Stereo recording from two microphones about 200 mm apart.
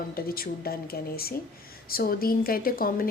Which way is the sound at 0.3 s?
50° left (ahead or behind).